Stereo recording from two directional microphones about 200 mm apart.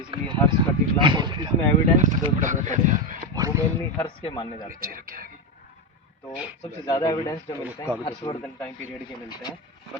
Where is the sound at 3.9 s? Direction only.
25° left (ahead or behind).